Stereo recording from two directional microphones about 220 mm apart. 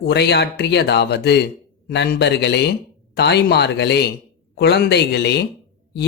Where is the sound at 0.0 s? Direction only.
50° left (ahead or behind).